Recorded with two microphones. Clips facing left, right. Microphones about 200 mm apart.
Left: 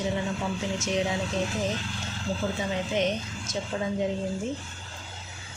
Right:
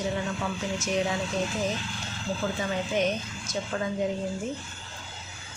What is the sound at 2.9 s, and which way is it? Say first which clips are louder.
Speech: even; 20° left (ahead or behind).